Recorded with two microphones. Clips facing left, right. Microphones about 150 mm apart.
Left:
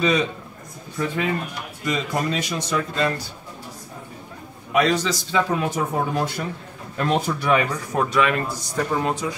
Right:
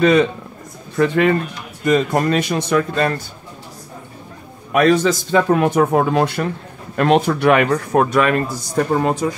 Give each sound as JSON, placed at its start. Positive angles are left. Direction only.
{"t": 0.0, "sound": "a man's voice", "side_deg": -60}
{"t": 0.9, "sound": "speech", "side_deg": -70}
{"t": 1.9, "sound": "a man's voice", "side_deg": -55}
{"t": 4.7, "sound": "a man's voice", "side_deg": -50}